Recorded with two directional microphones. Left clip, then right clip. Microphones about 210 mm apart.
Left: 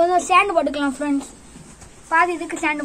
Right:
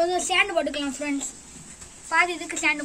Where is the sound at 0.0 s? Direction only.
20° right (ahead or behind).